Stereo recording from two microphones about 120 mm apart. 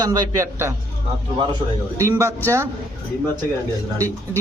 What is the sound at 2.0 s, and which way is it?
Speech, 25° right (ahead or behind).